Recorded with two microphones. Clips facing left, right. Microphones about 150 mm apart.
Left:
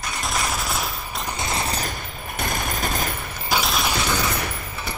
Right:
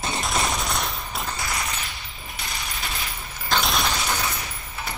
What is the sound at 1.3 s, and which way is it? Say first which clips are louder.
Fusillade: left 7 dB; 25° left (ahead or behind).